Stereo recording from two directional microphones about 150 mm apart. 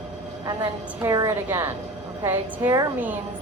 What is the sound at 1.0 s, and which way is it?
Speech, 20° right (ahead or behind).